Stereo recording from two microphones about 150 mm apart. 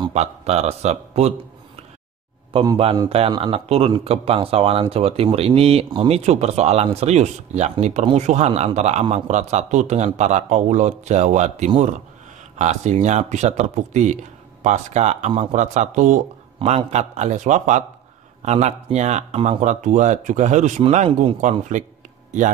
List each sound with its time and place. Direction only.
0.1 s a man's voice: 45° right (ahead or behind)
3.1 s a man's voice: 40° right (ahead or behind)